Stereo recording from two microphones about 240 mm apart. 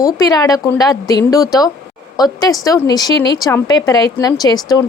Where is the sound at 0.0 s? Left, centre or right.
Centre.